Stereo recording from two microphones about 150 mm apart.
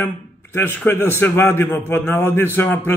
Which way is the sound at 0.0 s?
15° left (ahead or behind).